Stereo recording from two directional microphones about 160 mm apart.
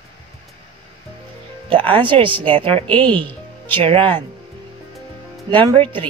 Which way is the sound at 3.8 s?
35° right (ahead or behind).